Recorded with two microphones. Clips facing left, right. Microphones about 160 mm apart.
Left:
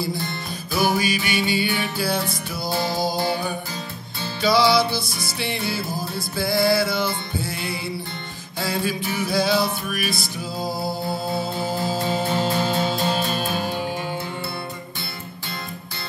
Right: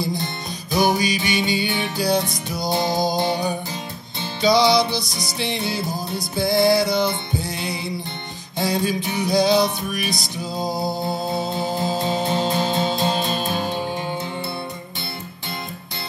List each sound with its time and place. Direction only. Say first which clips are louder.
0.2 s music: even; 20° right (ahead or behind)